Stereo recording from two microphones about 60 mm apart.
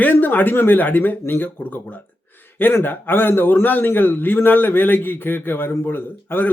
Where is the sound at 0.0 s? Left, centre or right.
Left.